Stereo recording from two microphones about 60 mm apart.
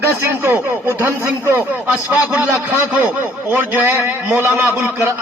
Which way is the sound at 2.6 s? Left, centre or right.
Right.